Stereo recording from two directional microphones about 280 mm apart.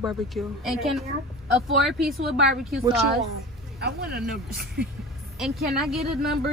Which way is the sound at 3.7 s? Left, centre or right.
Right.